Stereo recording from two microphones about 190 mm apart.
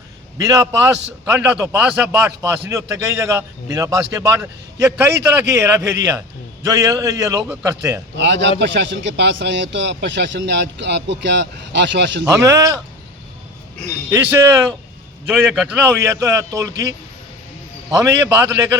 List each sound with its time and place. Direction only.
0.3 s a man's voice: 15° right (ahead or behind)
8.1 s a man's voice: 65° right (ahead or behind)
12.5 s a man's voice: 15° right (ahead or behind)
14.1 s a man's voice: 10° right (ahead or behind)
17.9 s a man's voice: 15° right (ahead or behind)